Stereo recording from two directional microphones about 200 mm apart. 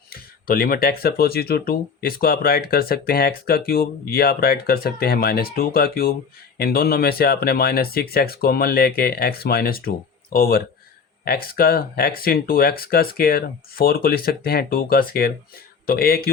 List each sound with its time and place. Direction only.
0.1 s speech: 45° left (ahead or behind)